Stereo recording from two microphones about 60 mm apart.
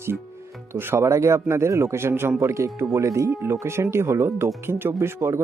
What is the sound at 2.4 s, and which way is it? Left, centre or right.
Speech, right.